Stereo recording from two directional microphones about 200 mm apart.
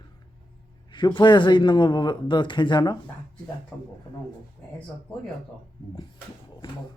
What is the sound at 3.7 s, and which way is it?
Speech, 5° left (ahead or behind).